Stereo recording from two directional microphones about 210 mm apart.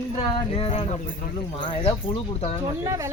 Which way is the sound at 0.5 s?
25° left (ahead or behind).